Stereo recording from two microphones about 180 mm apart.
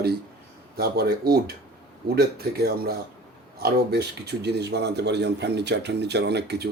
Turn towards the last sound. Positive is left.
turn(degrees=-70)  # may be behind; listen again after turning